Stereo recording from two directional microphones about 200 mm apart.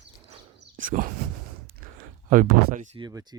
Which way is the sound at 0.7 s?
40° right (ahead or behind).